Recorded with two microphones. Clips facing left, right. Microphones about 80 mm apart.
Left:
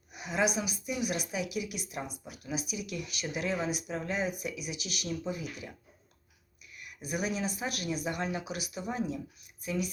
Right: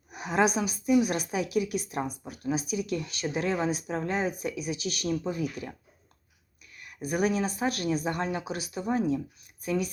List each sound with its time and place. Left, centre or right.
0.1 s a woman's voice: right
6.7 s a woman's voice: right